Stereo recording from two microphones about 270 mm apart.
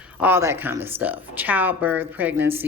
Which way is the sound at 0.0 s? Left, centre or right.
Centre.